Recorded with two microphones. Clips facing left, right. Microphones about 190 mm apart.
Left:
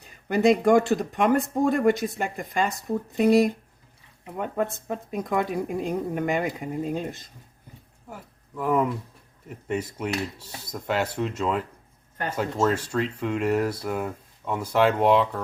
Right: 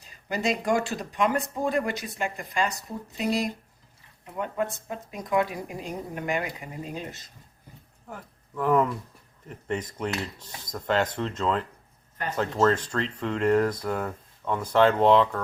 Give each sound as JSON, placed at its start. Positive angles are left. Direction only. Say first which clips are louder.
{"t": 0.0, "sound": "a woman's voice", "louder": "left 8 dB", "side_deg": 55}
{"t": 8.1, "sound": "speech", "louder": "right 1 dB", "side_deg": 10}